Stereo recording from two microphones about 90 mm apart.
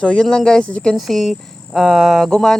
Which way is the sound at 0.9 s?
Centre (ahead or behind).